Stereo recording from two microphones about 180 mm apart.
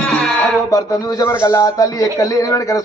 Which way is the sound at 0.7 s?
20° left (ahead or behind).